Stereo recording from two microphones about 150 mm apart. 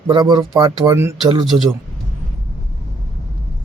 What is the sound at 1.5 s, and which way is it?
Speech, 20° right (ahead or behind).